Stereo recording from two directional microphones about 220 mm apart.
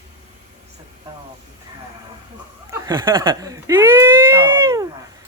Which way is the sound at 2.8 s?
20° right (ahead or behind).